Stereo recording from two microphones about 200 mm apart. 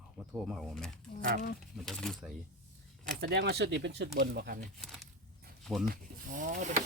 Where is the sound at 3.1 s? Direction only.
55° right (ahead or behind).